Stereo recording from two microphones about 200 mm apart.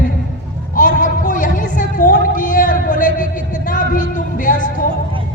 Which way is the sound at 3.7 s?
45° left (ahead or behind).